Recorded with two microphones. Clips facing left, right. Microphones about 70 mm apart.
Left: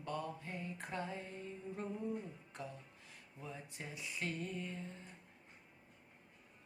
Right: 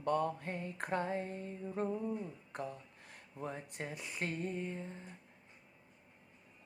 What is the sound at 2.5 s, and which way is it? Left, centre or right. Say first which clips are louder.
Speech: right 7 dB; right.